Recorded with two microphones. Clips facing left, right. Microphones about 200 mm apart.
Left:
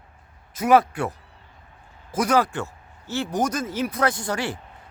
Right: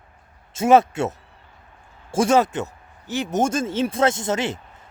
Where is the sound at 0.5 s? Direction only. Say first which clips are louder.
Right 3 dB; 25° right (ahead or behind).